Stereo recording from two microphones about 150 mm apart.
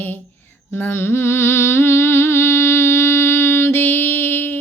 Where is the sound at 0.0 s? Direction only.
15° left (ahead or behind).